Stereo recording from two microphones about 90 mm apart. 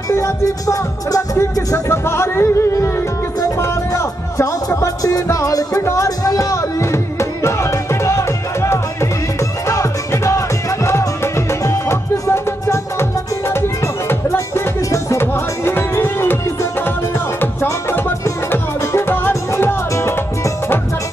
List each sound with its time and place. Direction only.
0.1 s music: 35° left (ahead or behind)